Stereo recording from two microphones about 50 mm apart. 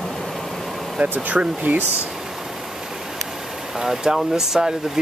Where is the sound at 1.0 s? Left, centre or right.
Right.